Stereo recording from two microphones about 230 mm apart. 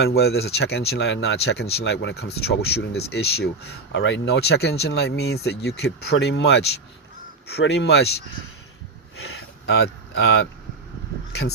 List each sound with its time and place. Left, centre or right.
0.0 s speech: left
9.6 s speech: left